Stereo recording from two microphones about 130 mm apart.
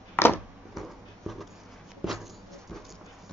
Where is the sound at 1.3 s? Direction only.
Centre (ahead or behind).